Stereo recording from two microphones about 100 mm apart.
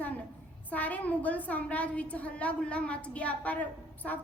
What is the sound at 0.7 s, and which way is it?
A woman's voice, 15° left (ahead or behind).